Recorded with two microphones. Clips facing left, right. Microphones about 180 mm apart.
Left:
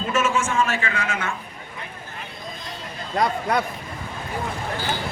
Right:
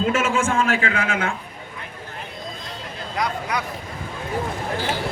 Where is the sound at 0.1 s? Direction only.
90° right.